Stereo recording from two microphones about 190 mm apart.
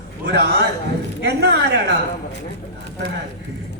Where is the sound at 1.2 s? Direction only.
65° right (ahead or behind).